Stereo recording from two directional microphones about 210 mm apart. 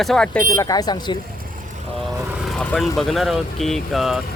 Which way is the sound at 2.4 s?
5° left (ahead or behind).